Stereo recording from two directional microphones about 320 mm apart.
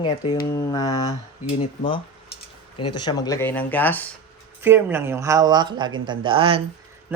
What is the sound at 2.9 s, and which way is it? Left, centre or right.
Speech, centre.